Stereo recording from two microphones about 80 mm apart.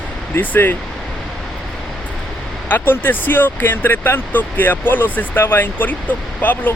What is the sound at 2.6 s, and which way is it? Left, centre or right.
Speech, left.